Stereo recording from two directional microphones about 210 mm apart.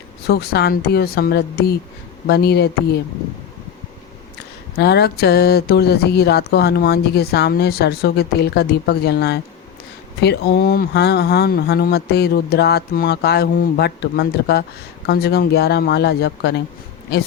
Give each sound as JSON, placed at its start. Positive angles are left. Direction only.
{"t": 0.3, "sound": "speech", "side_deg": 50}
{"t": 4.8, "sound": "speech", "side_deg": 50}